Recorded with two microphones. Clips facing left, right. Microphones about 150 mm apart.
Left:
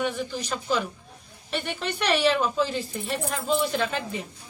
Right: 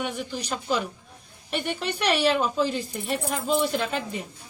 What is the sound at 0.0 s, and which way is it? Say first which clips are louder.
Speech: left 2 dB; 10° right (ahead or behind).